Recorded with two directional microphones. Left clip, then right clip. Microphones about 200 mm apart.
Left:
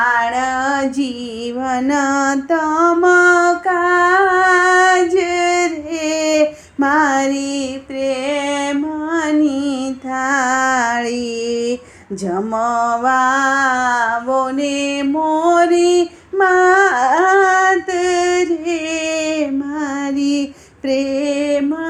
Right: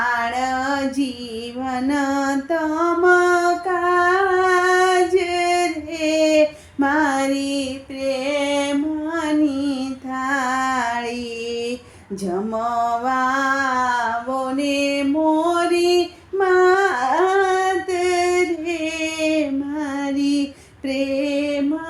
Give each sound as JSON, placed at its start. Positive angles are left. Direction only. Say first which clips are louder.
{"t": 0.0, "sound": "female singing", "louder": "left 5 dB", "side_deg": 15}
{"t": 12.3, "sound": "music", "louder": "left 5 dB", "side_deg": 20}
{"t": 15.8, "sound": "female singing", "louder": "left 4 dB", "side_deg": 20}
{"t": 20.1, "sound": "child singing", "louder": "left 2 dB", "side_deg": 15}
{"t": 21.1, "sound": "a sound", "louder": "left 4 dB", "side_deg": 15}